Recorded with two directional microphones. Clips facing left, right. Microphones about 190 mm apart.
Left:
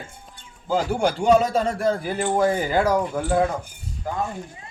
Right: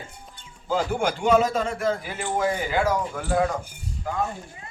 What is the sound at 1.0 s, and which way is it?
A man's voice, 35° left (ahead or behind).